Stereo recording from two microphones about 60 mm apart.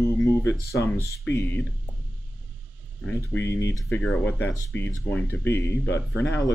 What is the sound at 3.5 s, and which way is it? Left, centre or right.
Speech, left.